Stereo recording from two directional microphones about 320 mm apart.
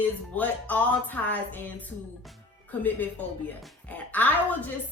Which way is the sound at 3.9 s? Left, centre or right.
Centre.